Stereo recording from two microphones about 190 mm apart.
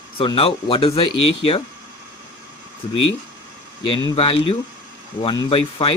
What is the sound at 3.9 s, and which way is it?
Speech, 30° left (ahead or behind).